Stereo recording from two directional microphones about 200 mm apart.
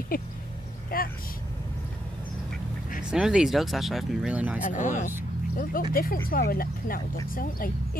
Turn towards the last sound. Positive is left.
turn(degrees=45)  # may be behind; listen again after turning